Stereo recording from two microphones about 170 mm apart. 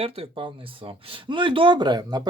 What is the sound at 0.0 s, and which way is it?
Speech, 30° right (ahead or behind).